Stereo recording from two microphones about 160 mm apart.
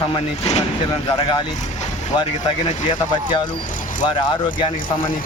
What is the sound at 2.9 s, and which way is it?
Speech, 30° left (ahead or behind).